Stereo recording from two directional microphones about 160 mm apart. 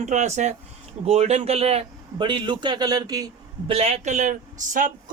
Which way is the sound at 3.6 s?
35° right (ahead or behind).